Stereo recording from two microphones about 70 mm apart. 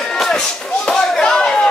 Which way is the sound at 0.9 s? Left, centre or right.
Centre.